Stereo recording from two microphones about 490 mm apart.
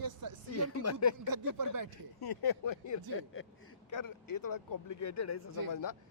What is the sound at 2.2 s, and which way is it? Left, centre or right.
Speech, left.